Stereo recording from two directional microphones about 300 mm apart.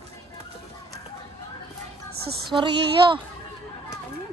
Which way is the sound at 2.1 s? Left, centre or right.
Right.